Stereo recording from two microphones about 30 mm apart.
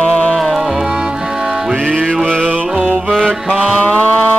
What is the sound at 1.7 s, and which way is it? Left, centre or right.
Music, left.